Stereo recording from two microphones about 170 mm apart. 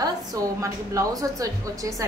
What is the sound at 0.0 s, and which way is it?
A woman's voice, 20° right (ahead or behind).